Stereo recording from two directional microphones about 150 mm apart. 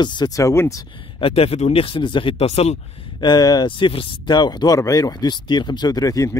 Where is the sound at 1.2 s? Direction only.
40° left (ahead or behind).